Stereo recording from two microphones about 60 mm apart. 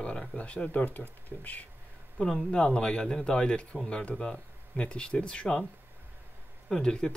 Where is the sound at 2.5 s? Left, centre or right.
Centre.